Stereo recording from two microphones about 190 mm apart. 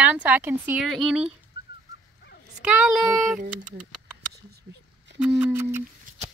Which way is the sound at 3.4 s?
40° right (ahead or behind).